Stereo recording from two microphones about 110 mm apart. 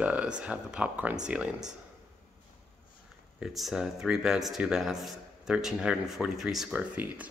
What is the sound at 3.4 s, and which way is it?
Speech, 5° right (ahead or behind).